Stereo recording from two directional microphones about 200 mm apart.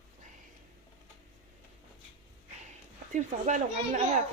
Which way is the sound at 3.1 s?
35° right (ahead or behind).